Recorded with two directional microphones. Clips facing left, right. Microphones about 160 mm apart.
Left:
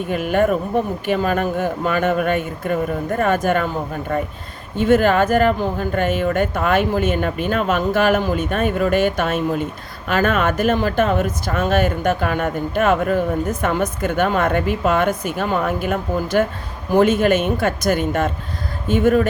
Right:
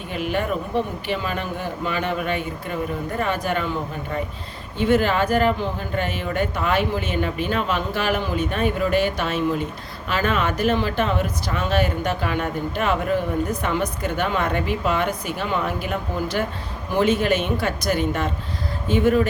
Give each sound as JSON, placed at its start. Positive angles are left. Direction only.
{"t": 0.1, "sound": "speech", "side_deg": 50}